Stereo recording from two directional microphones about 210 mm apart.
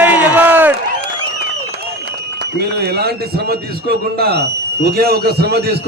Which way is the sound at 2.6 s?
50° right (ahead or behind).